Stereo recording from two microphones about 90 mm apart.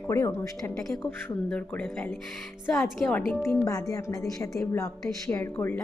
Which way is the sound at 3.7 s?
40° left (ahead or behind).